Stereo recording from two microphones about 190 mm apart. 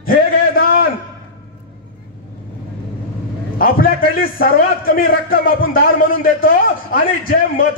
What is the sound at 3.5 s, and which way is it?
A man's voice, 50° left (ahead or behind).